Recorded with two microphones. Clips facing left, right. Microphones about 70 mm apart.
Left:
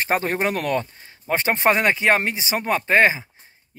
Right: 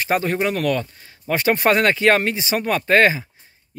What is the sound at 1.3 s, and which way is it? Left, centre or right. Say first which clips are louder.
Speech: right 2 dB; left.